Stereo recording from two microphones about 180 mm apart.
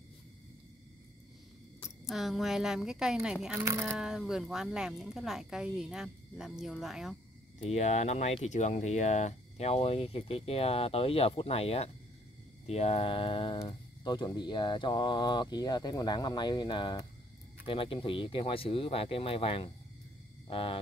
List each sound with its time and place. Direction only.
2.0 s speech: centre (ahead or behind)
3.5 s speech: 15° right (ahead or behind)
3.8 s speech: centre (ahead or behind)
7.5 s speech: 40° left (ahead or behind)